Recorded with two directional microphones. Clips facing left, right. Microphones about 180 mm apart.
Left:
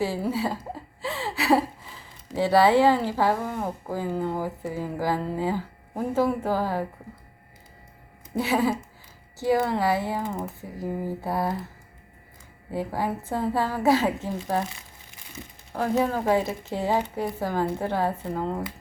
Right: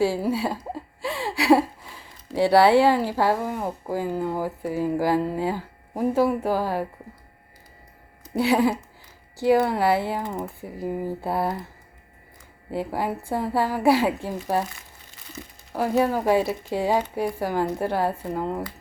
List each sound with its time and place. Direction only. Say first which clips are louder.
0.1 s speech: right 2 dB; 15° right (ahead or behind)
8.4 s speech: right 3 dB; 15° right (ahead or behind)
12.8 s speech: right 1 dB; 15° right (ahead or behind)
15.7 s speech: right 2 dB; 10° right (ahead or behind)